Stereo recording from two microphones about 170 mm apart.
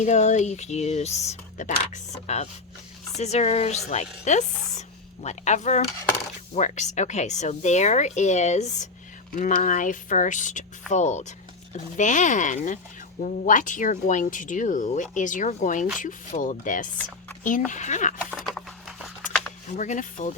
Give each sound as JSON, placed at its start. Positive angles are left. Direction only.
{"t": 0.0, "sound": "speech", "side_deg": 40}
{"t": 18.3, "sound": "a sound", "side_deg": -5}
{"t": 19.7, "sound": "speech", "side_deg": 45}